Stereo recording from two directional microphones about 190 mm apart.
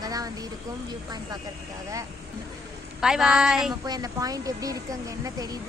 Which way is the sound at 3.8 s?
20° right (ahead or behind).